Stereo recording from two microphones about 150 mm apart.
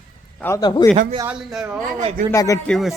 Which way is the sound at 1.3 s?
5° right (ahead or behind).